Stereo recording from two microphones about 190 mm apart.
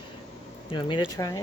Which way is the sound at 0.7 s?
25° left (ahead or behind).